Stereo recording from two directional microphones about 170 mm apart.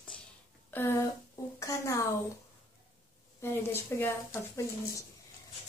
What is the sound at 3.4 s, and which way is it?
A woman's voice, 15° left (ahead or behind).